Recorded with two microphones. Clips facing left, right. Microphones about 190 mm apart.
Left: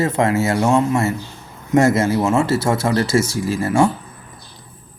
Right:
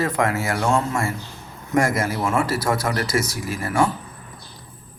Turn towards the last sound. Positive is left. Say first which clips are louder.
# left 5 dB
turn(degrees=25)  # may be behind; listen again after turning